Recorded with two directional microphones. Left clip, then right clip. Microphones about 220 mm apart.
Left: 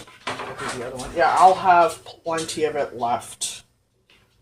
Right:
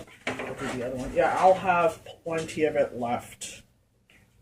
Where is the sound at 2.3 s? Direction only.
15° left (ahead or behind).